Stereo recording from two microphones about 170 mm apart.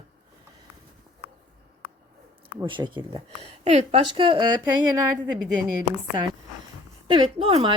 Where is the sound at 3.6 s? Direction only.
40° right (ahead or behind).